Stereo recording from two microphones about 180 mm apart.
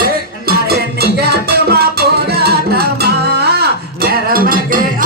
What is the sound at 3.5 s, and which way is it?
Cutlery, 60° right (ahead or behind).